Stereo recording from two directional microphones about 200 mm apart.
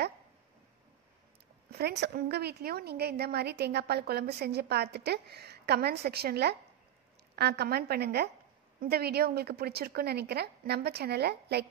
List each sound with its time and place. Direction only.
1.7 s a woman's voice: 55° right (ahead or behind)